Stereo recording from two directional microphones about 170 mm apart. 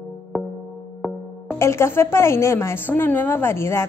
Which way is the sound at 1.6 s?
15° left (ahead or behind).